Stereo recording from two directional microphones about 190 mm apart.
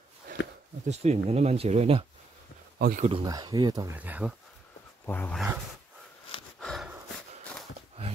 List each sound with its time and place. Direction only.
0.8 s speech: 35° right (ahead or behind)
2.8 s speech: 50° right (ahead or behind)
3.1 s speech: 25° right (ahead or behind)
5.0 s speech: 10° left (ahead or behind)
6.6 s snort: centre (ahead or behind)